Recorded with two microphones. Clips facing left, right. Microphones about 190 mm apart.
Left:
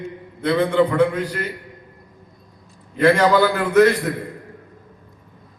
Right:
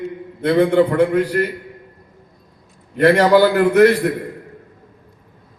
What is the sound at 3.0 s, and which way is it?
A man's voice, 60° right (ahead or behind).